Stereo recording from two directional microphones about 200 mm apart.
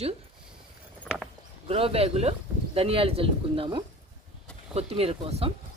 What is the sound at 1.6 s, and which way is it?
Speech, 30° right (ahead or behind).